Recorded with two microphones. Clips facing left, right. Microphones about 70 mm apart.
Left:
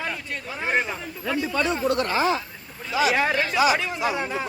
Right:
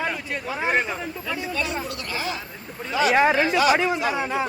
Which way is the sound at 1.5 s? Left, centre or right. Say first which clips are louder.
Left 7 dB; left.